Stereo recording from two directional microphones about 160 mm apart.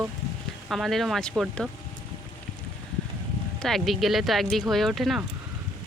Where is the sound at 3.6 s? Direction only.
Centre (ahead or behind).